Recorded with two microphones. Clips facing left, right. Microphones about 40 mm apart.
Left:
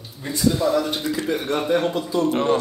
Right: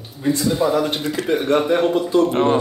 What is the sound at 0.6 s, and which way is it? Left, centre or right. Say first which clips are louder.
Speech: right 2 dB; right.